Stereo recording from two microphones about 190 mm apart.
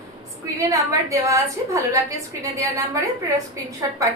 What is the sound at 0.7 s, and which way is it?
A woman's voice, 15° right (ahead or behind).